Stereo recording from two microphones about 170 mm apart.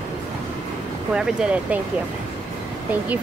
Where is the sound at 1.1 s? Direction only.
5° right (ahead or behind).